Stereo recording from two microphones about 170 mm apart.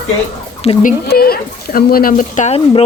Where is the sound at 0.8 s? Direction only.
55° left (ahead or behind).